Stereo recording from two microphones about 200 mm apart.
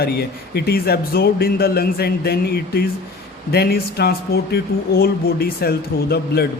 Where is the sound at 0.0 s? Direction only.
50° left (ahead or behind).